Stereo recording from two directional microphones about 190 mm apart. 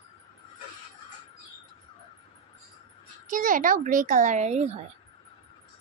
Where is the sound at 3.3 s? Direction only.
45° right (ahead or behind).